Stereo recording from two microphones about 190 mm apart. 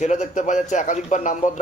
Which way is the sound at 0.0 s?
40° left (ahead or behind).